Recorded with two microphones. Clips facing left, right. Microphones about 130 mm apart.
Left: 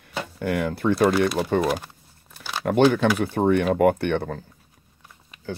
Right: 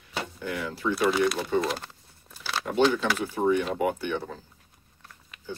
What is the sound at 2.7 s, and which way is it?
Speech, 55° left (ahead or behind).